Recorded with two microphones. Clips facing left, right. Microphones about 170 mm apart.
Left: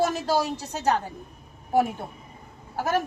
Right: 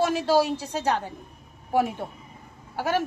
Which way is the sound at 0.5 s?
40° left (ahead or behind).